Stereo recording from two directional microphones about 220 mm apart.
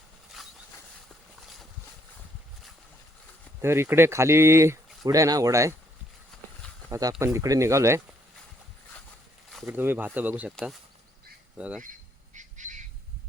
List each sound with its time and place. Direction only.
0.4 s a sound: centre (ahead or behind)
3.6 s speech: 10° right (ahead or behind)
6.3 s a sound: centre (ahead or behind)
6.9 s speech: 15° right (ahead or behind)
9.5 s speech: centre (ahead or behind)
12.3 s squawk: 35° right (ahead or behind)